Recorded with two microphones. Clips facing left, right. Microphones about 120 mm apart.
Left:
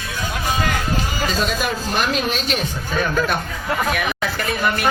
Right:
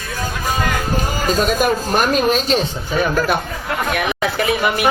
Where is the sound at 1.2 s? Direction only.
45° right (ahead or behind).